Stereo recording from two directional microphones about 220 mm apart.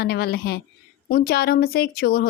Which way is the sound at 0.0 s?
45° left (ahead or behind).